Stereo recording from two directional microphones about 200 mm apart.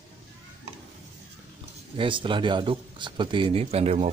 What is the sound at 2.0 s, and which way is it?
A man's voice, 25° right (ahead or behind).